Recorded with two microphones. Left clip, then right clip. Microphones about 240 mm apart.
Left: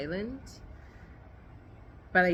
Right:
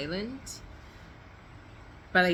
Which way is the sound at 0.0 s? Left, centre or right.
Centre.